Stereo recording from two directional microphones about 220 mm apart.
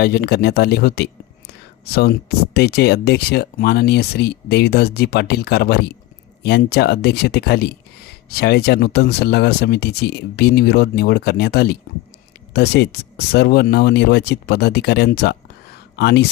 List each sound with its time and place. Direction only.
0.0 s speech: 45° left (ahead or behind)